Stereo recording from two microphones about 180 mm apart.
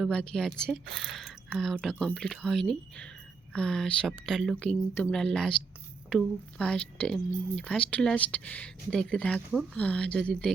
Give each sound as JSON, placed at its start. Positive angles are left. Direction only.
{"t": 0.0, "sound": "speech", "side_deg": 5}